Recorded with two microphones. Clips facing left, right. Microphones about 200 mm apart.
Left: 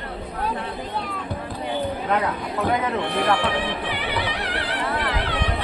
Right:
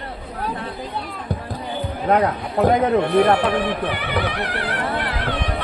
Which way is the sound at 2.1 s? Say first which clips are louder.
Right 5 dB; 40° right (ahead or behind).